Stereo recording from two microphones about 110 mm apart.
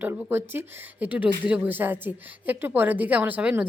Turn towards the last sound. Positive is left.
turn(degrees=-10)  # may be behind; listen again after turning